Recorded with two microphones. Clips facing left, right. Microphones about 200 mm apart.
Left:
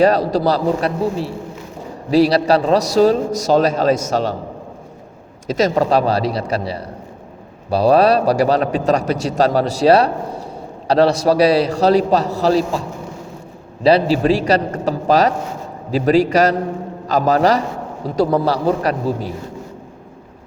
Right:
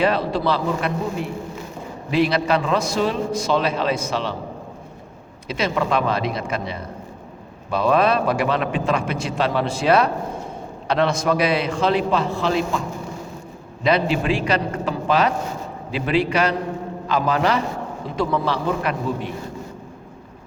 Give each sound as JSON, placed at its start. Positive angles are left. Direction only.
{"t": 0.0, "sound": "a man's voice", "side_deg": 40}
{"t": 5.5, "sound": "a man's voice", "side_deg": 40}
{"t": 13.8, "sound": "a man's voice", "side_deg": 35}